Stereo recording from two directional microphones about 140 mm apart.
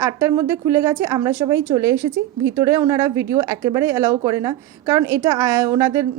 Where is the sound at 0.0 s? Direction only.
20° right (ahead or behind).